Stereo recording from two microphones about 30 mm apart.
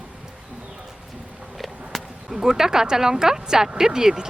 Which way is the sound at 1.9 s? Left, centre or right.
Centre.